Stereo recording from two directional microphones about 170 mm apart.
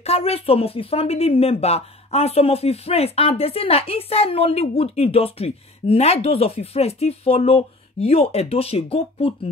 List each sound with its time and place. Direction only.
0.0 s a woman's voice: 35° left (ahead or behind)